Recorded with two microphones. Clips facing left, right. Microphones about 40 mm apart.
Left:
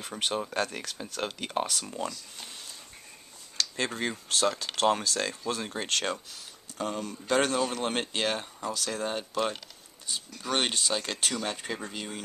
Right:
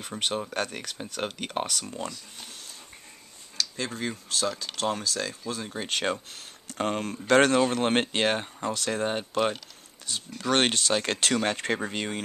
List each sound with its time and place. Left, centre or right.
0.0 s speech: centre
1.2 s speech: centre
1.7 s speech: centre
3.5 s speech: centre
6.3 s speech: right
10.0 s speech: right